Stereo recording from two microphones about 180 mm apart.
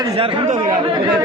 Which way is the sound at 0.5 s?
45° right (ahead or behind).